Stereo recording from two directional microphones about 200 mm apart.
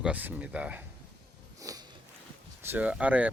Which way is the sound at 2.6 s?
10° right (ahead or behind).